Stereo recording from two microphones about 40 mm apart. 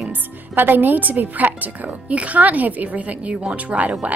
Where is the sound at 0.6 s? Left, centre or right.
Right.